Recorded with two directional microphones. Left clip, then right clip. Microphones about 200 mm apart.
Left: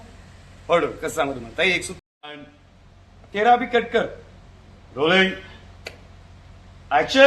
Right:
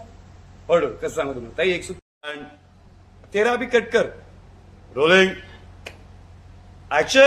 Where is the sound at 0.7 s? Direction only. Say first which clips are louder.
Right 1 dB; 25° right (ahead or behind).